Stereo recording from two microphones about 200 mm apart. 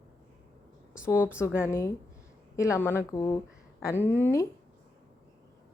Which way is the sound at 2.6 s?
15° left (ahead or behind).